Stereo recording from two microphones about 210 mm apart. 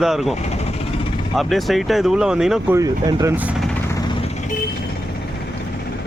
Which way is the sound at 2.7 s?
15° right (ahead or behind).